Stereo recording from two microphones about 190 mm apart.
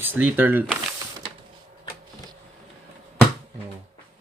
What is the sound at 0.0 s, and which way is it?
Speech, 10° right (ahead or behind).